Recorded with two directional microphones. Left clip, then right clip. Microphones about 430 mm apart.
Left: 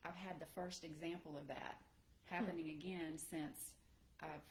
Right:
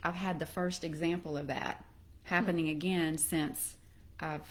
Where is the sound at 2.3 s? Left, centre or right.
Right.